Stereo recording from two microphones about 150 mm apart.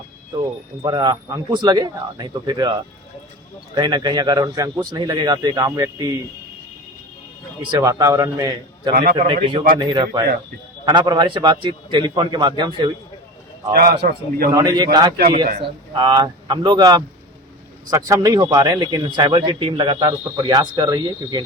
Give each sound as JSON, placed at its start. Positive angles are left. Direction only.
{"t": 0.8, "sound": "a man's voice", "side_deg": -30}
{"t": 3.8, "sound": "a man's voice", "side_deg": -30}
{"t": 7.6, "sound": "a man's voice", "side_deg": -25}
{"t": 9.1, "sound": "a man's voice", "side_deg": -40}
{"t": 13.7, "sound": "a man's voice", "side_deg": -90}
{"t": 14.5, "sound": "a man's voice", "side_deg": -25}
{"t": 16.0, "sound": "a man's voice", "side_deg": -30}